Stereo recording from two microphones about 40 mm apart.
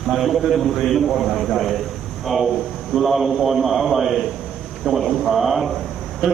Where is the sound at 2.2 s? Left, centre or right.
Centre.